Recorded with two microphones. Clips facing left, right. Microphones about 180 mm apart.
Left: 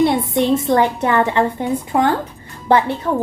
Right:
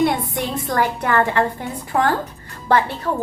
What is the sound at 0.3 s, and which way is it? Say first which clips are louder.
A woman's voice: left 7 dB; 25° left (ahead or behind).